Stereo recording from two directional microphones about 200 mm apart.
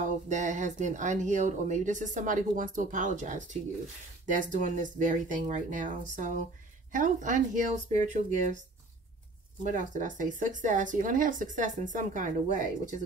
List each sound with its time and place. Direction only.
0.3 s speech: 40° right (ahead or behind)
9.6 s speech: 40° right (ahead or behind)